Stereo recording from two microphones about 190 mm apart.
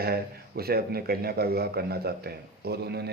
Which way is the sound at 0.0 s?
55° right (ahead or behind).